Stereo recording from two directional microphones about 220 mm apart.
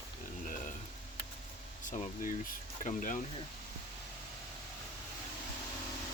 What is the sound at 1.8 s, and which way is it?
Speech, 35° left (ahead or behind).